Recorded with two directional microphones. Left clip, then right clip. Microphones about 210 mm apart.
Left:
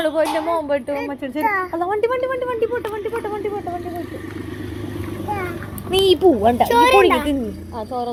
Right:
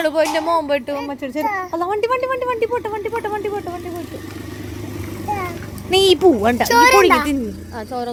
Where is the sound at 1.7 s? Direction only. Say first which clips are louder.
Right 1 dB; 40° right (ahead or behind).